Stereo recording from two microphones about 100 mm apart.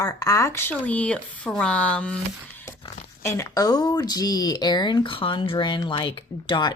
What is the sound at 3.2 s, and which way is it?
Speech, 30° left (ahead or behind).